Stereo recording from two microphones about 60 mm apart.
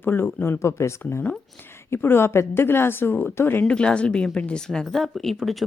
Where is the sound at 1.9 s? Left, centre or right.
Left.